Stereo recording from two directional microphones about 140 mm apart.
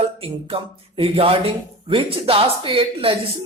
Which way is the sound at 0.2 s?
40° right (ahead or behind).